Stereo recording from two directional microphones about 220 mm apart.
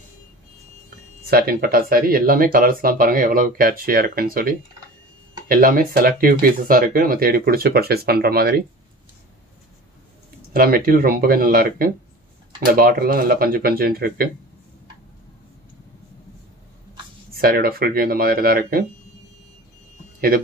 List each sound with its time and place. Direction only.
0.8 s speech: 45° right (ahead or behind)
10.5 s speech: 45° right (ahead or behind)
17.3 s speech: 45° right (ahead or behind)